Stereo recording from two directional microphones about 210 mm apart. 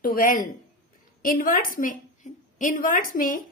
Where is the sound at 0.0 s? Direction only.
40° left (ahead or behind).